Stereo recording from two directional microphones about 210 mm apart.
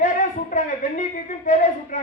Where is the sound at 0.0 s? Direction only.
35° left (ahead or behind).